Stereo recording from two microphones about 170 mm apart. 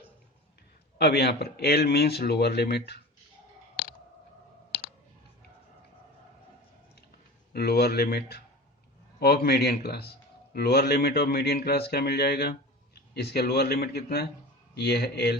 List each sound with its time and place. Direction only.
0.9 s speech: 75° left (ahead or behind)
7.5 s speech: 65° left (ahead or behind)